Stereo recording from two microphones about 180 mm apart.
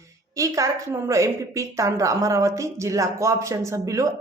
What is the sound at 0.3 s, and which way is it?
A woman's voice, 15° right (ahead or behind).